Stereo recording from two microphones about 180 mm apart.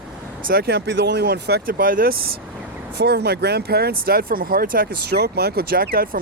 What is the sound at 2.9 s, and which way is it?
Speech, 65° right (ahead or behind).